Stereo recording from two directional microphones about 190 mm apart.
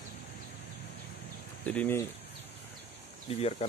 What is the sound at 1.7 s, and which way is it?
Speech, 10° left (ahead or behind).